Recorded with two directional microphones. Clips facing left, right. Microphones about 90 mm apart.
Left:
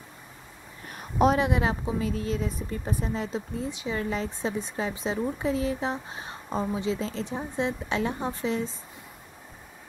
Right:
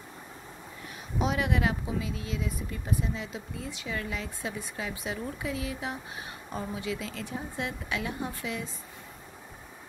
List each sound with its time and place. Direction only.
1.1 s speech: 50° left (ahead or behind)
1.4 s a woman's voice: 25° left (ahead or behind)
2.0 s speech: 45° left (ahead or behind)